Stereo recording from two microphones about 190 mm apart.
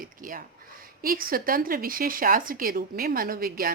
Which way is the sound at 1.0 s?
50° right (ahead or behind).